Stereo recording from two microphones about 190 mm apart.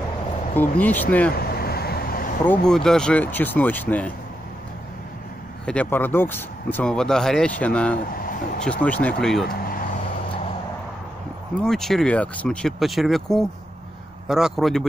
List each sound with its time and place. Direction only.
0.6 s speech: 10° left (ahead or behind)
1.3 s vehicle: 55° left (ahead or behind)
2.4 s speech: 5° left (ahead or behind)
5.7 s speech: 10° left (ahead or behind)
8.2 s a sound: 45° left (ahead or behind)
8.6 s speech: 5° left (ahead or behind)
11.6 s speech: centre (ahead or behind)